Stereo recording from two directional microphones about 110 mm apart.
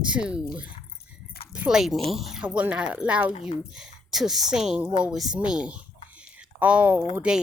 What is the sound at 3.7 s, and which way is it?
Speech, 5° right (ahead or behind).